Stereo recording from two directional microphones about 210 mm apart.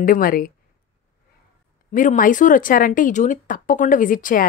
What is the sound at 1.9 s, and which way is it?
Speech, 40° left (ahead or behind).